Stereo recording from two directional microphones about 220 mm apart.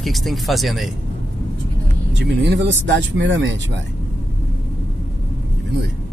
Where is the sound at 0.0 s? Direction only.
Centre (ahead or behind).